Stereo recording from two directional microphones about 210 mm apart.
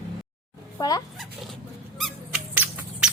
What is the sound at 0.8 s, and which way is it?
Speech, 20° left (ahead or behind).